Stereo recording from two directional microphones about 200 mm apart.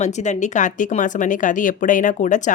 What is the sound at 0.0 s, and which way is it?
Speech, 35° left (ahead or behind).